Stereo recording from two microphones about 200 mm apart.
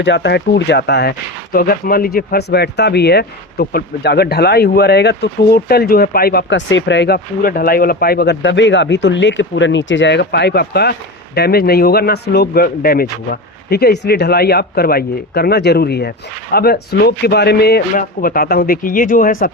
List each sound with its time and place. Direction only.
0.0 s speech: 60° left (ahead or behind); by 19.5 s 45° left (ahead or behind)